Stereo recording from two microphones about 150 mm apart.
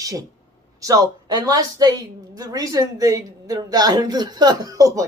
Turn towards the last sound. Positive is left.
turn(degrees=-25)  # may be behind; listen again after turning